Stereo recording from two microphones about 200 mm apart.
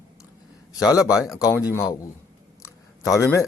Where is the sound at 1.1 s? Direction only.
15° left (ahead or behind).